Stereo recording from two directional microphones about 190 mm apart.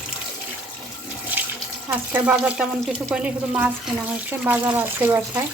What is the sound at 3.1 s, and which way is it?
Speech, 5° right (ahead or behind).